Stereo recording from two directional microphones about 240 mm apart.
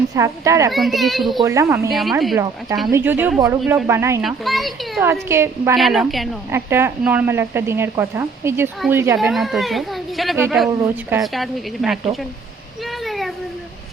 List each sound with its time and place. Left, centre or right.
0.1 s speech: centre
0.7 s a woman's voice: centre
1.4 s speech: centre
1.9 s a woman's voice: centre
2.3 s speech: centre
4.2 s a woman's voice: centre
5.3 s a woman's voice: centre
11.2 s a woman's voice: centre
13.1 s a sound: centre